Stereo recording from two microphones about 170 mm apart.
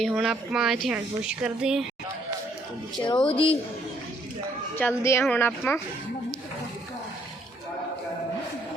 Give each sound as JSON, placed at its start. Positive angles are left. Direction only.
{"t": 0.1, "sound": "speech", "side_deg": 0}
{"t": 3.0, "sound": "speech", "side_deg": 30}
{"t": 4.8, "sound": "speech", "side_deg": 15}